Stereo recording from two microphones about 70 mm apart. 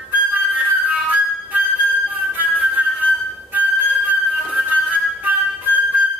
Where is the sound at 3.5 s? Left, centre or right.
Right.